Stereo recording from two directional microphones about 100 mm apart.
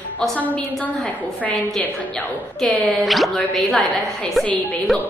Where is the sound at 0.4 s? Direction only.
15° left (ahead or behind).